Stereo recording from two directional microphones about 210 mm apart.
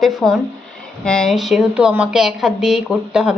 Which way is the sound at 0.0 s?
Centre (ahead or behind).